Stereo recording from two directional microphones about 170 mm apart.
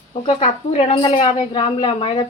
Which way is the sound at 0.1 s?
35° left (ahead or behind).